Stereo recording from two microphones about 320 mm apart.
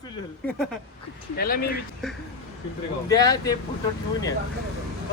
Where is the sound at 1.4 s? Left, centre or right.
Left.